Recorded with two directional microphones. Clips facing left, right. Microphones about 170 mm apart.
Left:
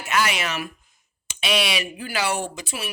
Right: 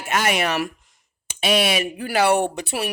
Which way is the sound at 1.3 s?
45° right (ahead or behind).